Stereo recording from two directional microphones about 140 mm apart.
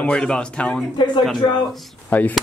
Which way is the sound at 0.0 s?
5° left (ahead or behind).